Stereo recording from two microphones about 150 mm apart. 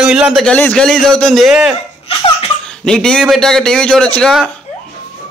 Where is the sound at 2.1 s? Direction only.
35° left (ahead or behind).